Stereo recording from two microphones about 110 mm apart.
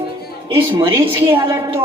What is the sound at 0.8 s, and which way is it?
Speech, 25° right (ahead or behind).